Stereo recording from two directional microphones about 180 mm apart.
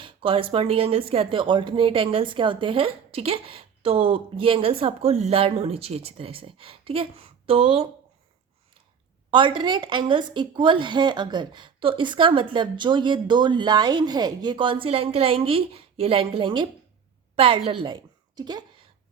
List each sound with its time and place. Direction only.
0.0 s speech: 30° right (ahead or behind)
9.3 s a woman's voice: 25° right (ahead or behind)